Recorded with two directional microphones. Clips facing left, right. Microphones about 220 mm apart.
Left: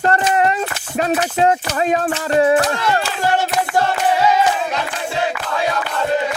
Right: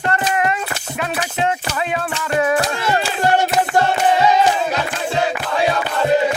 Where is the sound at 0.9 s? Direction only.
35° left (ahead or behind).